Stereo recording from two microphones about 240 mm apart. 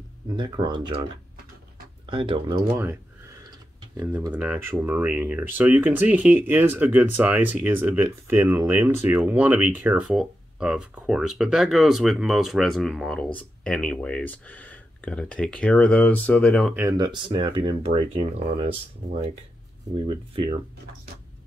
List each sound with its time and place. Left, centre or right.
0.4 s speech: centre
2.0 s speech: right
2.7 s speech: centre
16.7 s speech: centre
20.3 s speech: centre